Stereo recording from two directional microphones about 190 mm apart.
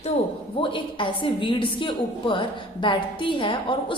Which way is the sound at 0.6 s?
25° left (ahead or behind).